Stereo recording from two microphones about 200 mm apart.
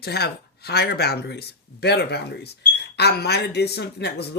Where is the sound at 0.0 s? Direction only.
55° left (ahead or behind).